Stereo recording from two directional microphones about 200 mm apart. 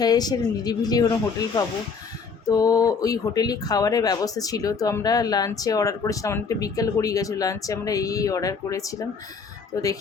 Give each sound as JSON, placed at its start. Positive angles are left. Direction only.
{"t": 0.0, "sound": "speech", "side_deg": 20}
{"t": 2.5, "sound": "speech", "side_deg": 15}